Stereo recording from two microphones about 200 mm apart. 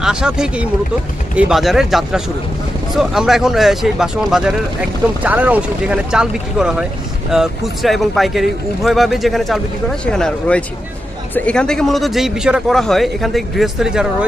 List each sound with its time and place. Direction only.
0.0 s speech: 5° right (ahead or behind)